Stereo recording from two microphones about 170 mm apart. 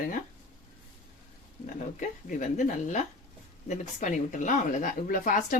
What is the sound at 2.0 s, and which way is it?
Speech, 45° left (ahead or behind).